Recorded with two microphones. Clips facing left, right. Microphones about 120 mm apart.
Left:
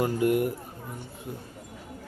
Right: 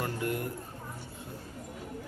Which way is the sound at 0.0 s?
15° left (ahead or behind).